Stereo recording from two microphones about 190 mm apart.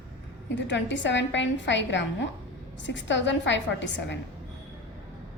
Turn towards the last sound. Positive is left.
turn(degrees=70)  # may be behind; listen again after turning